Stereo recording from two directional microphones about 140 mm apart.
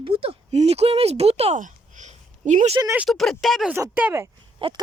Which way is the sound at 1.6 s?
65° right (ahead or behind).